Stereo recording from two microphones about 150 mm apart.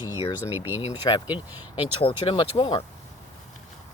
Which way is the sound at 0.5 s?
15° right (ahead or behind).